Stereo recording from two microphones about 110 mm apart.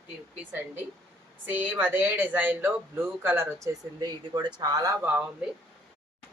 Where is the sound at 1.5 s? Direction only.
15° right (ahead or behind).